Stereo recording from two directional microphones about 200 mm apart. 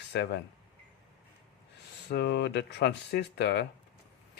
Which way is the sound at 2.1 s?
55° left (ahead or behind).